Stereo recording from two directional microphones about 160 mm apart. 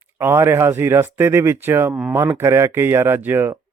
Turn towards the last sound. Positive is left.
turn(degrees=-15)  # may be behind; listen again after turning